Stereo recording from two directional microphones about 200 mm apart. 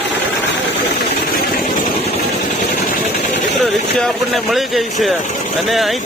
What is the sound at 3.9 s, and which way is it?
Speech, centre (ahead or behind).